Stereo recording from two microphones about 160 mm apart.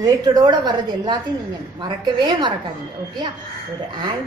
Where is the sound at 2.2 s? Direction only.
30° right (ahead or behind).